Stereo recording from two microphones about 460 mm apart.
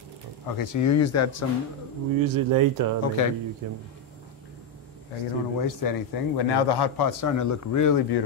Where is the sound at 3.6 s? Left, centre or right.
Right.